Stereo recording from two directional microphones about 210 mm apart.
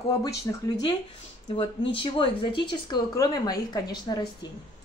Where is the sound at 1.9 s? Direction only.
25° left (ahead or behind).